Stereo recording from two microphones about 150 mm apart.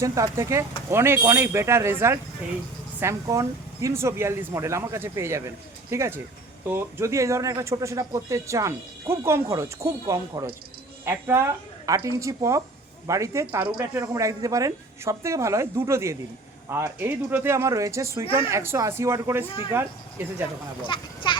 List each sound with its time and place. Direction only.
0.0 s a woman's voice: 20° right (ahead or behind)
20.8 s a child's voice: 35° left (ahead or behind)